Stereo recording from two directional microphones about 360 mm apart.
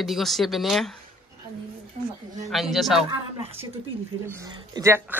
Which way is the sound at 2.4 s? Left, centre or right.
Centre.